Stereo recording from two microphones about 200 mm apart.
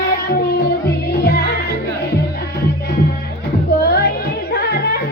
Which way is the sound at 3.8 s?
55° left (ahead or behind).